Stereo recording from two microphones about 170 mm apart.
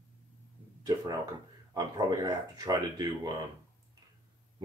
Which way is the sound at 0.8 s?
20° right (ahead or behind).